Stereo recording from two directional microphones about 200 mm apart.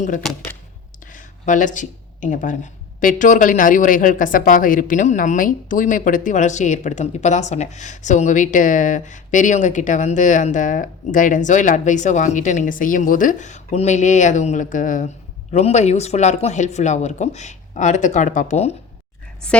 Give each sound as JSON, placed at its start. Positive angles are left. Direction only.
{"t": 0.2, "sound": "speech", "side_deg": 0}
{"t": 1.1, "sound": "a sound", "side_deg": 40}
{"t": 3.0, "sound": "a woman's voice", "side_deg": 40}
{"t": 19.4, "sound": "a woman's voice", "side_deg": 5}